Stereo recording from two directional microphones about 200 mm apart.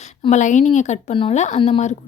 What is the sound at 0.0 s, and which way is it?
A woman's voice, 35° left (ahead or behind).